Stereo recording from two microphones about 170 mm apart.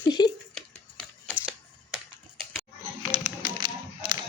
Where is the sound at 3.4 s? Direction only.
25° right (ahead or behind).